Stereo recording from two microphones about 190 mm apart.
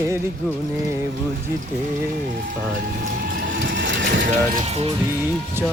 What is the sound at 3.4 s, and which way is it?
Mechanisms, 70° right (ahead or behind).